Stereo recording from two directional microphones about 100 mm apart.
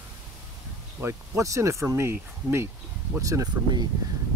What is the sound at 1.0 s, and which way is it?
Speech, 30° right (ahead or behind).